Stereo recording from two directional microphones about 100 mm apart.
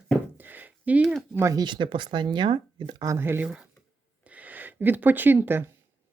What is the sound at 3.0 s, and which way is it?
Speech, 30° right (ahead or behind).